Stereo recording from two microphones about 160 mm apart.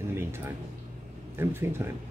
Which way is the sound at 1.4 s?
15° right (ahead or behind).